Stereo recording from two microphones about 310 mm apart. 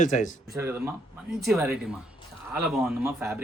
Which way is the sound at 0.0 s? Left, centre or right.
Left.